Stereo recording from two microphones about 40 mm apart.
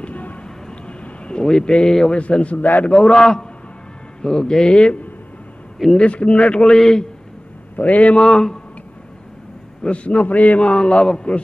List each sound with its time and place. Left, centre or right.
0.0 s vehicle: left
0.4 s a sound: left
2.1 s a man's voice: left
3.1 s a man's voice: centre
5.9 s a man's voice: left
6.8 s a man's voice: centre
7.7 s a man's voice: left
8.2 s a man's voice: centre
9.8 s a man's voice: left
10.7 s a man's voice: left